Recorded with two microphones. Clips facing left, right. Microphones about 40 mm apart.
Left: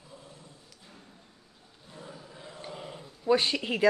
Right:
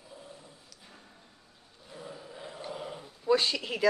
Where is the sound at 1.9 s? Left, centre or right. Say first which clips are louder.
Right 2 dB; centre.